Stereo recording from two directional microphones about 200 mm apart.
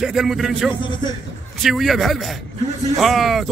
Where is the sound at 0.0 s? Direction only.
Centre (ahead or behind).